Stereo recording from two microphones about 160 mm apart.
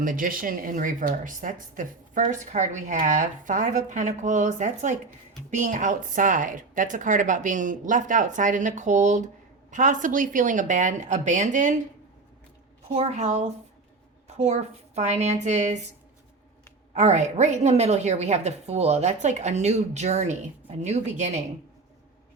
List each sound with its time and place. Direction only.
0.0 s speech: 60° right (ahead or behind)
12.9 s speech: 45° right (ahead or behind)
16.9 s speech: 45° right (ahead or behind)